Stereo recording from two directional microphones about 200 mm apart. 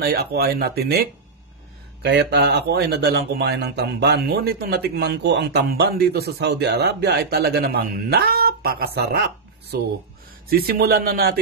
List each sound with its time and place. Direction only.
0.0 s speech: 50° right (ahead or behind)
2.0 s speech: 60° right (ahead or behind)
10.5 s speech: 50° right (ahead or behind)